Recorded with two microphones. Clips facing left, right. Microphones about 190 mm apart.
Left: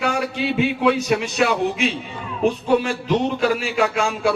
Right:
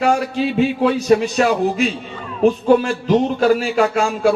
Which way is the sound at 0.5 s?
35° right (ahead or behind).